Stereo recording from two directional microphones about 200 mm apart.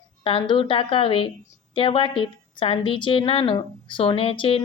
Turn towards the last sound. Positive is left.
turn(degrees=30)  # may be behind; listen again after turning